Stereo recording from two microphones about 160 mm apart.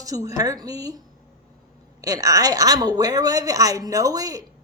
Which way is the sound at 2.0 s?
20° right (ahead or behind).